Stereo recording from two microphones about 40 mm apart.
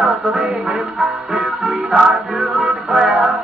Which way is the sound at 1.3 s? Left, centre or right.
Right.